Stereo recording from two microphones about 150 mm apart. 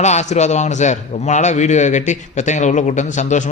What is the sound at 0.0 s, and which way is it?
A man's voice, 50° left (ahead or behind).